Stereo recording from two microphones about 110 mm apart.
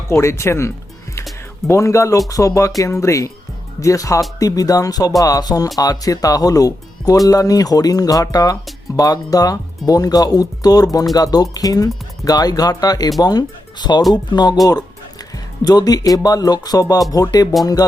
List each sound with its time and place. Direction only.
0.1 s speech: 25° left (ahead or behind); by 14.6 s 40° left (ahead or behind)
15.6 s speech: 35° left (ahead or behind)